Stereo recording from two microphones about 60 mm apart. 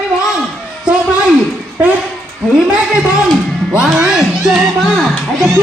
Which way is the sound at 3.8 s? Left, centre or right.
Centre.